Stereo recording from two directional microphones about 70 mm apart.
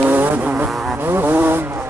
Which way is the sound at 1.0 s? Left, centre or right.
Right.